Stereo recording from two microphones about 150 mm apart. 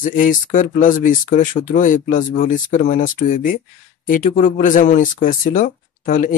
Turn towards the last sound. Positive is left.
turn(degrees=60)  # may be behind; listen again after turning